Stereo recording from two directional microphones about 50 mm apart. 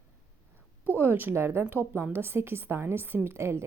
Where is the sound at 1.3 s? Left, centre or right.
Right.